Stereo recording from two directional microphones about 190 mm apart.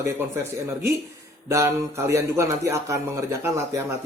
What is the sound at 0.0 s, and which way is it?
Speech, 15° right (ahead or behind).